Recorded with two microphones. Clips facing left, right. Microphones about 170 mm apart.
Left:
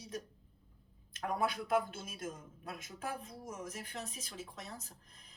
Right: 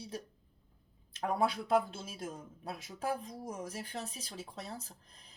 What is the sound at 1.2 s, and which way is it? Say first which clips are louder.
Speech: right 3 dB; 30° right (ahead or behind).